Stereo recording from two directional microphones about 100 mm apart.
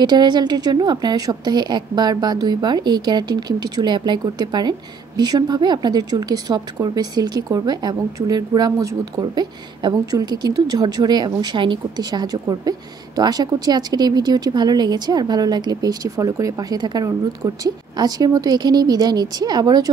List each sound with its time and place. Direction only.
0.0 s a woman's voice: 45° right (ahead or behind)
9.2 s a woman's voice: 45° right (ahead or behind)